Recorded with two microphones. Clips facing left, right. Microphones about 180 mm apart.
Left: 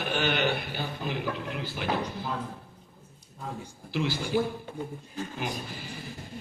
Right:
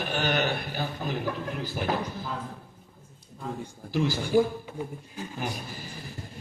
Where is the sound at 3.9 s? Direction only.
45° right (ahead or behind).